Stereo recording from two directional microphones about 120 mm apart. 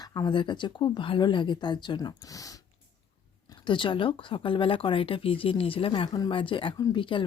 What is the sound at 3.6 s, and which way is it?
Speech, 45° left (ahead or behind).